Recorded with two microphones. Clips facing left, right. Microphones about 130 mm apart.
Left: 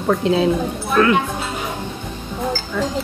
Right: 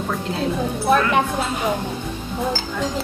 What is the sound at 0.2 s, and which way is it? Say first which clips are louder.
Speech: left 8 dB; 90° left.